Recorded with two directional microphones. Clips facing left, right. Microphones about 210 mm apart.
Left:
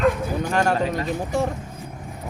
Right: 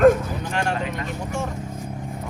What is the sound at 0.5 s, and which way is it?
Speech, 40° left (ahead or behind).